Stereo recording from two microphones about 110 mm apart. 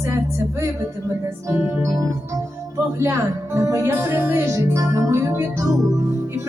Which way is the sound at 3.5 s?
25° right (ahead or behind).